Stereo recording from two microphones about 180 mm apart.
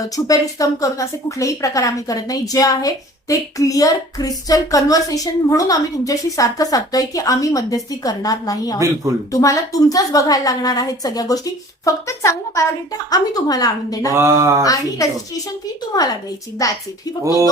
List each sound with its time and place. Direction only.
0.3 s speech: 20° left (ahead or behind)
14.1 s speech: 15° right (ahead or behind)
14.6 s speech: 20° left (ahead or behind)
16.6 s a woman's voice: 20° left (ahead or behind)